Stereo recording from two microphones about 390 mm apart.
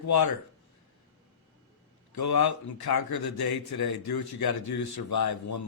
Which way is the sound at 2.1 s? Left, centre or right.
Left.